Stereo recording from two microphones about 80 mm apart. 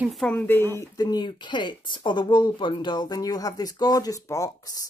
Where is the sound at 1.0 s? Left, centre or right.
Left.